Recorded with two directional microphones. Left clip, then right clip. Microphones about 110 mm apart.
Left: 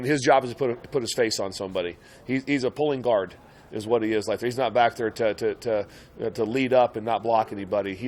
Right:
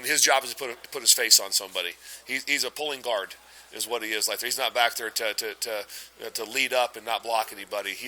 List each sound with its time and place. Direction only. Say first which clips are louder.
0.0 s speech: left 2 dB; 10° left (ahead or behind)